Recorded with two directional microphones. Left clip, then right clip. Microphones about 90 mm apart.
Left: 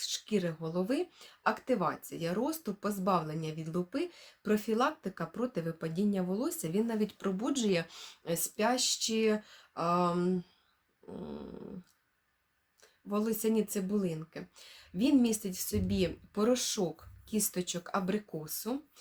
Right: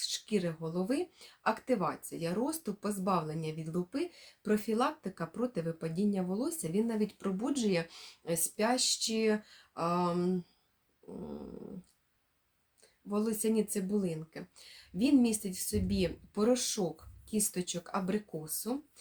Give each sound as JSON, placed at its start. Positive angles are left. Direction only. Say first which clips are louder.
{"t": 0.0, "sound": "speech", "louder": "even", "side_deg": 25}
{"t": 13.1, "sound": "speech", "louder": "left 1 dB", "side_deg": 25}